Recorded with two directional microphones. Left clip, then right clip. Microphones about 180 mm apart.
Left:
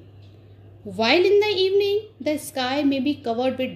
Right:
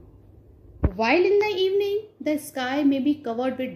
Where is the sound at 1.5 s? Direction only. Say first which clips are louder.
Left 3 dB; centre (ahead or behind).